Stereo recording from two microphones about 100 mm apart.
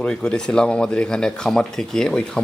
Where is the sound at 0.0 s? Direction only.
10° left (ahead or behind).